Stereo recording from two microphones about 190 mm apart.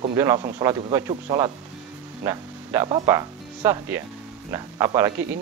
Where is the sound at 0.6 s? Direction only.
15° right (ahead or behind).